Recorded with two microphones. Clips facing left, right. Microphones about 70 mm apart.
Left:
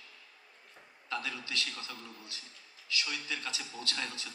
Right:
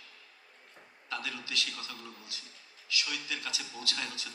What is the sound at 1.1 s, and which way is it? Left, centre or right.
A man's voice, left.